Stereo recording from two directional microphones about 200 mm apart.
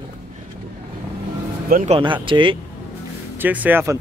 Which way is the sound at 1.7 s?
40° right (ahead or behind).